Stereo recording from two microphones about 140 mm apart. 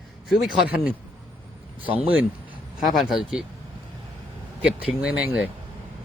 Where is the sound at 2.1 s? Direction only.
10° right (ahead or behind).